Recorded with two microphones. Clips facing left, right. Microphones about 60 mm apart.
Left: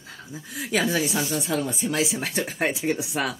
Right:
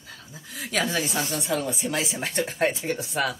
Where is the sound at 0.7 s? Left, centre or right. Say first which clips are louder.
Left 2 dB; centre.